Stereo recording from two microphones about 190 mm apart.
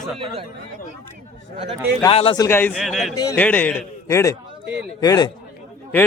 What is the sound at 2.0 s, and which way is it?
Speech, 30° left (ahead or behind).